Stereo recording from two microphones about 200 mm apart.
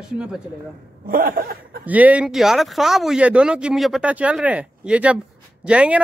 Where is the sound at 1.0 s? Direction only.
45° right (ahead or behind).